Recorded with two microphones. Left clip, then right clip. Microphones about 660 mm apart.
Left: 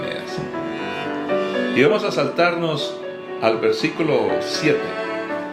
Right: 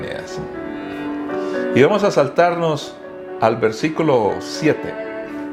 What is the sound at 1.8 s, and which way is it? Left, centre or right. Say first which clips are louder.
Speech: right 4 dB; right.